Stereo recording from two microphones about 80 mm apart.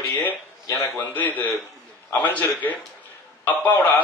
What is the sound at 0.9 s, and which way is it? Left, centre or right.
A man's voice, left.